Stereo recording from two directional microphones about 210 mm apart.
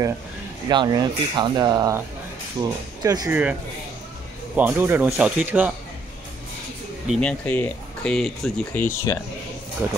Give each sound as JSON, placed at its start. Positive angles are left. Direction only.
{"t": 0.7, "sound": "speech", "side_deg": -20}
{"t": 4.6, "sound": "speech", "side_deg": -10}
{"t": 7.1, "sound": "speech", "side_deg": 5}
{"t": 9.8, "sound": "speech", "side_deg": -10}